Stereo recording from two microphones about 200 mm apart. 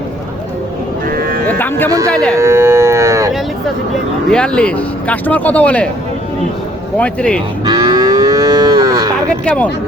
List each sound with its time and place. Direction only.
1.0 s cattle: 45° right (ahead or behind)
1.5 s a sound: 10° left (ahead or behind)
2.0 s speech: 5° left (ahead or behind)
2.4 s livestock: 10° right (ahead or behind)
4.3 s speech: 5° left (ahead or behind)
6.9 s speech: 5° left (ahead or behind)
7.7 s moo: 20° right (ahead or behind)
9.4 s speech: 5° left (ahead or behind)